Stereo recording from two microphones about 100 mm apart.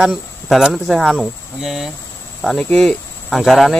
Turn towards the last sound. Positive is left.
turn(degrees=0)  # may be behind; listen again after turning